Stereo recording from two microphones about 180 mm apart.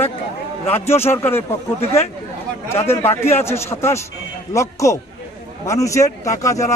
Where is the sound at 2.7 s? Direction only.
15° left (ahead or behind).